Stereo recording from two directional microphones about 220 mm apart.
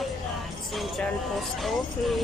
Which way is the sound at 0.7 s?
Centre (ahead or behind).